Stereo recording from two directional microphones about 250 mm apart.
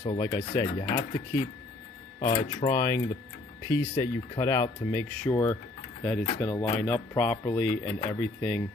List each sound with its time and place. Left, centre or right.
0.0 s speech: centre